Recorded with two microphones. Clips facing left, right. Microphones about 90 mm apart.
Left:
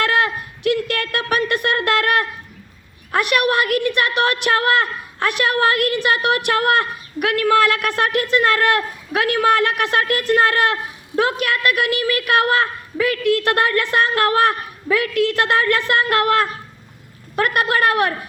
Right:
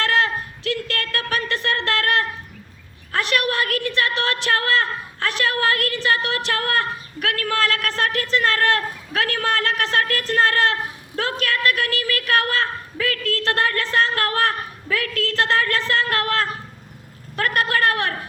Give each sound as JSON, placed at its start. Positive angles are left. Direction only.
{"t": 0.0, "sound": "a woman's voice", "side_deg": 20}